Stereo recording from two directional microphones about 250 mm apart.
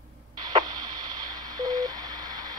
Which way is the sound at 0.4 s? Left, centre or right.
Centre.